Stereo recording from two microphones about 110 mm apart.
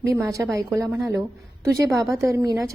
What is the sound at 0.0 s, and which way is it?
A woman's voice, 30° right (ahead or behind).